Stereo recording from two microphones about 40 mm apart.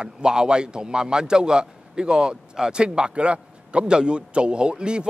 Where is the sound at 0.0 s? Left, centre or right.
Right.